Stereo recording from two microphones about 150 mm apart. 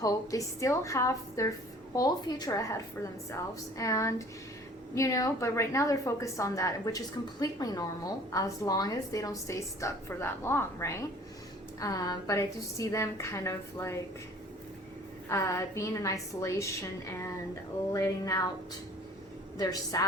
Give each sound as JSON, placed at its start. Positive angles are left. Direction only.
{"t": 0.0, "sound": "a woman's voice", "side_deg": 20}
{"t": 15.3, "sound": "a woman's voice", "side_deg": 20}
{"t": 19.5, "sound": "a woman's voice", "side_deg": 25}